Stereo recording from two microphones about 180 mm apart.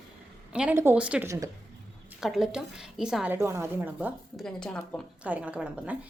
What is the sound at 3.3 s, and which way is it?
A woman's voice, 15° right (ahead or behind).